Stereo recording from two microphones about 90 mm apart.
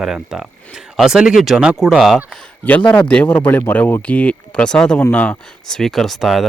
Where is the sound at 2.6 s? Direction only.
15° left (ahead or behind).